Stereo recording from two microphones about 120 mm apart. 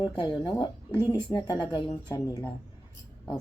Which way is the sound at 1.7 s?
35° left (ahead or behind).